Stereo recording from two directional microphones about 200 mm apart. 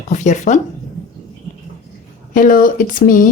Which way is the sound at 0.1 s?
40° left (ahead or behind).